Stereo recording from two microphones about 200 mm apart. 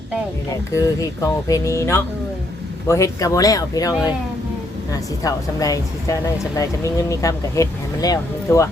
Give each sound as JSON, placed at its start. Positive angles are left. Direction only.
{"t": 0.7, "sound": "speech", "side_deg": 15}